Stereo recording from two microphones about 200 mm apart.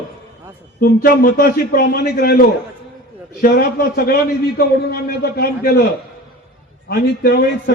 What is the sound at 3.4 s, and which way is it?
A man's voice, 50° left (ahead or behind).